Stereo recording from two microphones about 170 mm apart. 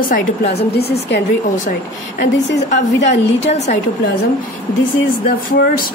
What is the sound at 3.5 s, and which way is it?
Speech, 40° left (ahead or behind).